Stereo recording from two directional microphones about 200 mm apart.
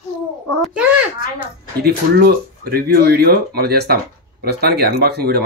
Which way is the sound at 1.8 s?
50° right (ahead or behind).